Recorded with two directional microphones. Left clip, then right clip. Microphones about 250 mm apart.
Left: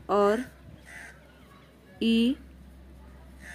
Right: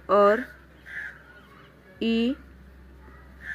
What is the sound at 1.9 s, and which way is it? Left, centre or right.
Speech, centre.